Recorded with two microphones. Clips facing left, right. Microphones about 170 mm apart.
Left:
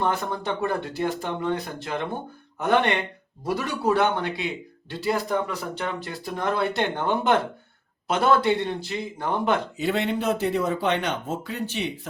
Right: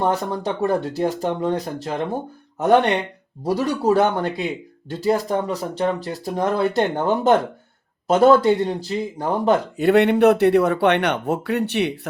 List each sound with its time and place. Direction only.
0.0 s speech: 40° right (ahead or behind)
9.7 s speech: 60° right (ahead or behind)